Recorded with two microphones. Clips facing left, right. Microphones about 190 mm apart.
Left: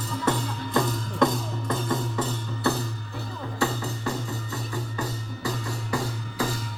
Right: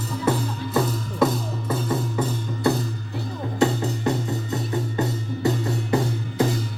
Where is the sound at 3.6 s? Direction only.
20° right (ahead or behind).